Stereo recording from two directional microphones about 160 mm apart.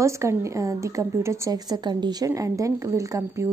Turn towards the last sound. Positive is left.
turn(degrees=-20)  # may be behind; listen again after turning